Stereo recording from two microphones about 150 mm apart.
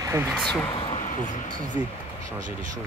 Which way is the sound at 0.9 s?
55° left (ahead or behind).